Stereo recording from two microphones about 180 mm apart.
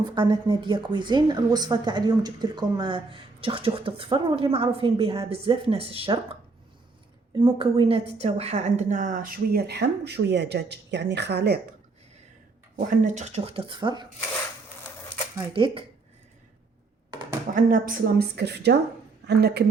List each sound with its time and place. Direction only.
0.1 s a woman's voice: 25° right (ahead or behind)
7.3 s a woman's voice: 30° right (ahead or behind); by 11.6 s 65° right (ahead or behind)
12.7 s speech: 45° right (ahead or behind); by 14.1 s 25° right (ahead or behind)
15.5 s a woman's voice: 30° right (ahead or behind)
17.5 s a woman's voice: 50° right (ahead or behind); by 19.6 s 65° right (ahead or behind)